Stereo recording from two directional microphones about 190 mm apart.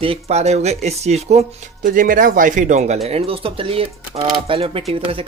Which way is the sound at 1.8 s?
45° right (ahead or behind).